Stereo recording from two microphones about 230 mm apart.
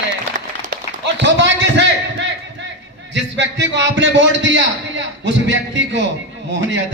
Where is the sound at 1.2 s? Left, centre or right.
Right.